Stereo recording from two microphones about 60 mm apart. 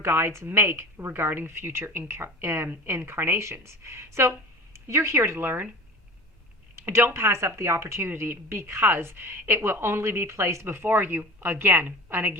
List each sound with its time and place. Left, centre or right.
0.0 s a woman's voice: right
6.7 s a woman's voice: right